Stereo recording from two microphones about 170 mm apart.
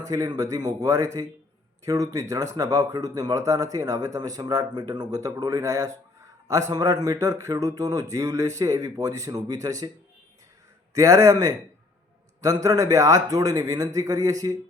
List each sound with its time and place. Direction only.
0.0 s a man's voice: 20° right (ahead or behind)
10.9 s a man's voice: 20° right (ahead or behind)
12.6 s a man's voice: 20° right (ahead or behind)